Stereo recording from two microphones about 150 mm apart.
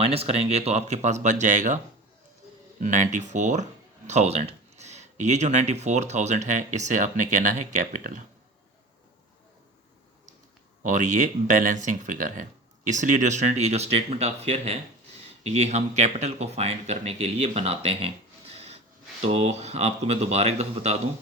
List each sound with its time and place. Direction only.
0.0 s speech: 40° right (ahead or behind)
2.8 s speech: 55° right (ahead or behind)
10.8 s speech: 60° right (ahead or behind)